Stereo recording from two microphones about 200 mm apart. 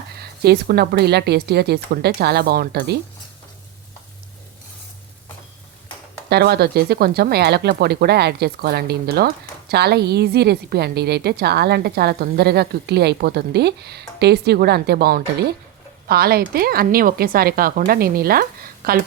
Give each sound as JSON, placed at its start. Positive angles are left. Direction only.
{"t": 0.2, "sound": "speech", "side_deg": -50}
{"t": 6.2, "sound": "speech", "side_deg": -55}